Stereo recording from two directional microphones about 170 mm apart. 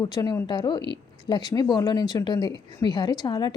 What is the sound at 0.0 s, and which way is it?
Speech, 20° left (ahead or behind).